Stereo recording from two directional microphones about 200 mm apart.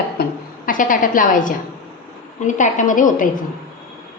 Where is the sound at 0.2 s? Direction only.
40° left (ahead or behind).